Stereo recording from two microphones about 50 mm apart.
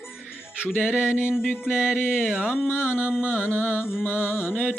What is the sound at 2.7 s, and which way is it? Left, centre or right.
Music, left.